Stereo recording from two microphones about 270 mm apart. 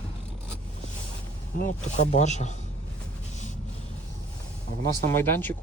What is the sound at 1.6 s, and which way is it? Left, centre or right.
Speech, left.